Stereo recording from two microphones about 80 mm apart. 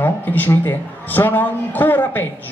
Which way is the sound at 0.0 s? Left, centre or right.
Left.